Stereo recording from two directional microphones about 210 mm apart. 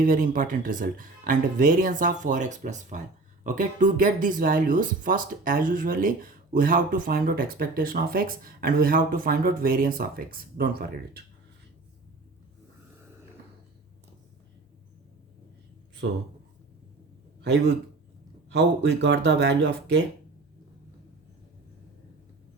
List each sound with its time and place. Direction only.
0.0 s speech: 40° right (ahead or behind)
18.5 s speech: 55° right (ahead or behind)